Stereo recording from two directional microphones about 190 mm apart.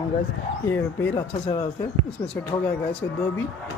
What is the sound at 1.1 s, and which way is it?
Speech, 30° left (ahead or behind).